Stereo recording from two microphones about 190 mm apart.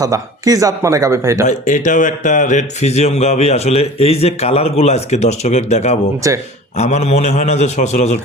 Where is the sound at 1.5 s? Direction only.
40° left (ahead or behind).